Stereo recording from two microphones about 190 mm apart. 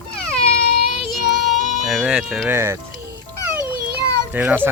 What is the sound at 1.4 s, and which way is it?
Speech, centre (ahead or behind).